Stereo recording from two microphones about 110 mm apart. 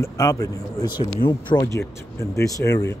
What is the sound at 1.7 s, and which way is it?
Speech, 25° left (ahead or behind).